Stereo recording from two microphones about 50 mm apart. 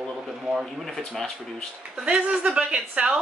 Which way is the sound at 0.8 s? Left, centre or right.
Centre.